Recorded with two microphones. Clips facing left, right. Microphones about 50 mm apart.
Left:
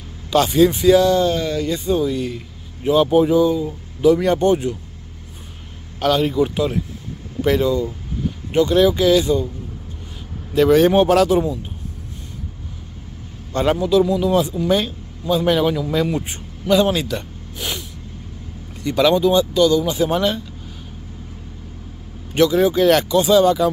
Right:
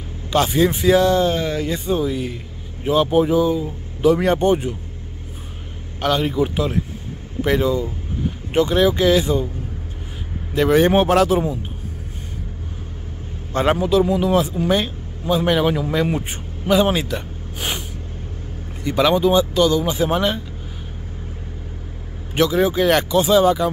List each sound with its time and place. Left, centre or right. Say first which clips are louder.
0.3 s speech: left 3 dB; centre
4.1 s speech: left 1 dB; right
5.9 s speech: left 2 dB; centre
10.5 s speech: left 2 dB; centre
13.5 s speech: even; right
17.6 s snort: right 1 dB; right
18.8 s speech: left 1 dB; centre
19.5 s speech: left 1 dB; right
20.1 s speech: even; centre
22.3 s speech: left 2 dB; centre